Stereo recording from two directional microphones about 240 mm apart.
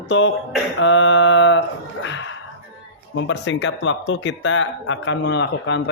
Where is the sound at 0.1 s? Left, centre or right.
Left.